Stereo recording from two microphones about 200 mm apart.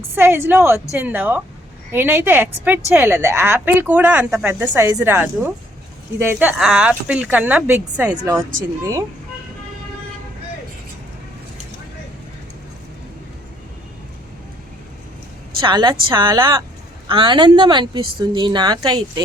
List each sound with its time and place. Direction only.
0.1 s a woman's voice: 10° right (ahead or behind)
15.6 s a woman's voice: 20° right (ahead or behind)